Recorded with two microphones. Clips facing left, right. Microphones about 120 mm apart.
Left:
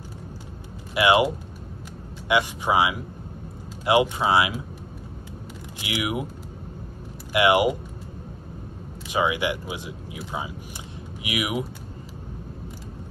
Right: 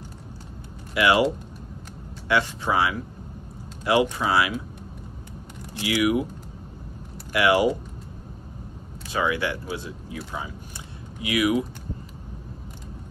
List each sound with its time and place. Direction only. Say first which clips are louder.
0.9 s speech: left 1 dB; 20° left (ahead or behind)
2.2 s speech: left 1 dB; 15° left (ahead or behind)
5.8 s speech: right 6 dB; 20° left (ahead or behind)
7.3 s speech: left 1 dB; 20° left (ahead or behind)
9.1 s speech: left 1 dB; 15° left (ahead or behind)